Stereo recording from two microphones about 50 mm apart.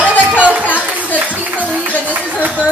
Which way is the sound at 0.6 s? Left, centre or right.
Left.